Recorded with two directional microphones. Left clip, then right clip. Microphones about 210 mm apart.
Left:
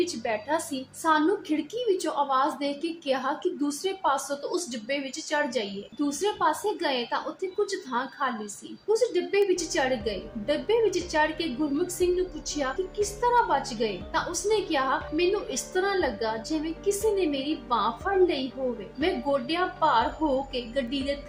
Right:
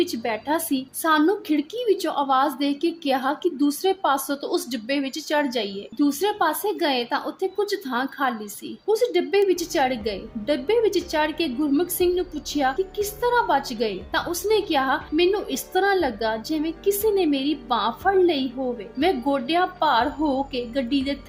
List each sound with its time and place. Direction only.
0.0 s a woman's voice: 45° right (ahead or behind)
12.5 s a woman's voice: 45° right (ahead or behind)